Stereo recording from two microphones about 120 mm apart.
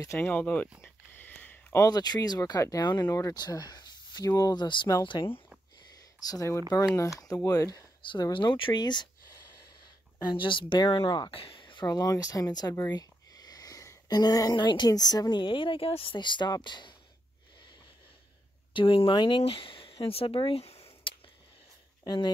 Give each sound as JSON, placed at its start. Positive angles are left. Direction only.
{"t": 0.2, "sound": "speech", "side_deg": 15}
{"t": 1.2, "sound": "a sound", "side_deg": 15}
{"t": 1.9, "sound": "speech", "side_deg": 35}
{"t": 8.0, "sound": "speech", "side_deg": 40}
{"t": 10.3, "sound": "speech", "side_deg": 45}
{"t": 11.9, "sound": "speech", "side_deg": 30}
{"t": 18.7, "sound": "speech", "side_deg": 45}
{"t": 22.0, "sound": "speech", "side_deg": 40}